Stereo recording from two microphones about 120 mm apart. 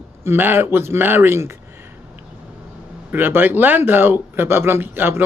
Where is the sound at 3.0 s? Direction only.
15° right (ahead or behind).